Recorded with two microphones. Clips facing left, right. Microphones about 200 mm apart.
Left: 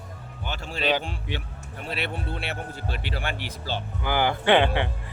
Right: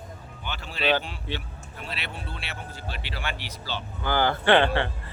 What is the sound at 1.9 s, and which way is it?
Speech, 55° left (ahead or behind).